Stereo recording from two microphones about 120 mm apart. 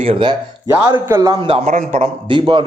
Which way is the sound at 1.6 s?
75° right (ahead or behind).